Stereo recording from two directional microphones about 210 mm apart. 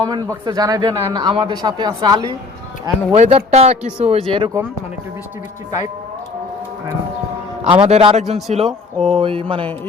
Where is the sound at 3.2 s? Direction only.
30° right (ahead or behind).